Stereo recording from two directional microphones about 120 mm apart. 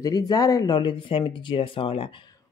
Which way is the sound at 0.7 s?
40° left (ahead or behind).